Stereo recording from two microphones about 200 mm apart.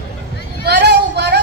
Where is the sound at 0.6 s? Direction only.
55° right (ahead or behind).